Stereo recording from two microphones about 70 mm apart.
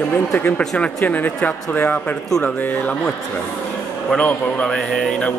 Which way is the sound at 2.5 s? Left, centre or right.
Left.